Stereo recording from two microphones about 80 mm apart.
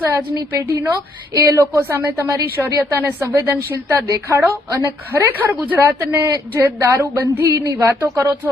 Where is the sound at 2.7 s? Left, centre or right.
Right.